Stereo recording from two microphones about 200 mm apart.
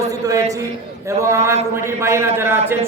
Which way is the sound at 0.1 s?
15° right (ahead or behind).